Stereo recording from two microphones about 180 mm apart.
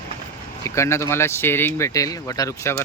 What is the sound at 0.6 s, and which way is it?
Speech, 15° left (ahead or behind).